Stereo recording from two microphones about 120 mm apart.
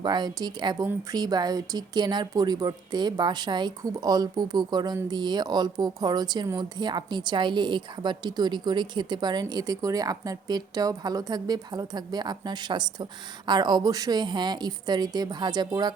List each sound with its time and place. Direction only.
0.0 s a woman's voice: 35° right (ahead or behind)